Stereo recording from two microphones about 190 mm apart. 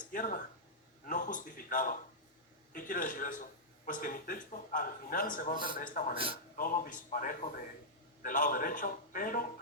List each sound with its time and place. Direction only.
0.1 s a man's voice: 45° left (ahead or behind)